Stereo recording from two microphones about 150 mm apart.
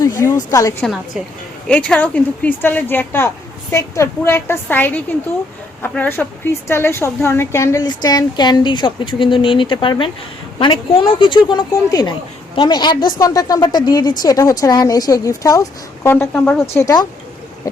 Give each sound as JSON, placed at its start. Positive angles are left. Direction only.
{"t": 0.0, "sound": "a woman's voice", "side_deg": 20}
{"t": 1.6, "sound": "a woman's voice", "side_deg": 5}
{"t": 16.7, "sound": "a woman's voice", "side_deg": 25}